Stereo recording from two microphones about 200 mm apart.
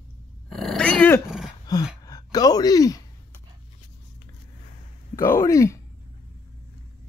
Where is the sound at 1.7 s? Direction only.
20° left (ahead or behind).